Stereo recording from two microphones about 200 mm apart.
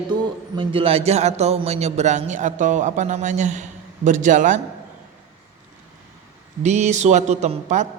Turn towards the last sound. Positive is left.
turn(degrees=-35)  # may be behind; listen again after turning